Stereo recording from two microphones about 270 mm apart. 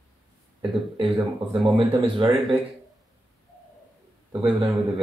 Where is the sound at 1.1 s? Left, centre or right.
Centre.